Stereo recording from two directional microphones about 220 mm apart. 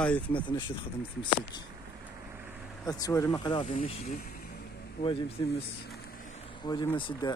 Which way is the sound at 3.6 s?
35° left (ahead or behind).